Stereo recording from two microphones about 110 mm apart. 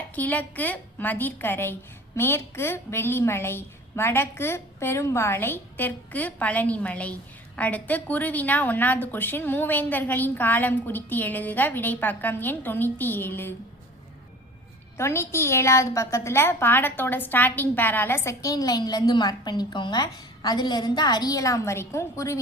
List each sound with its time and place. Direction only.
0.2 s a woman's voice: 15° left (ahead or behind)
14.9 s a woman's voice: 25° left (ahead or behind)